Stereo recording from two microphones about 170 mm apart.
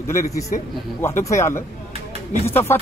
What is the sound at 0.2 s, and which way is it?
Speech, 20° left (ahead or behind).